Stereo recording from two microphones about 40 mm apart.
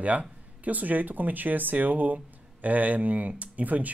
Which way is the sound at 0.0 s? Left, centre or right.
Right.